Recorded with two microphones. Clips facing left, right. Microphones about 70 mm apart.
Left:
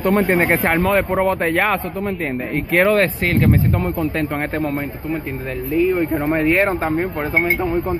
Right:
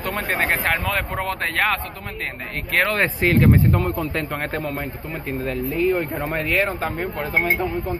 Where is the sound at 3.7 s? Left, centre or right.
Centre.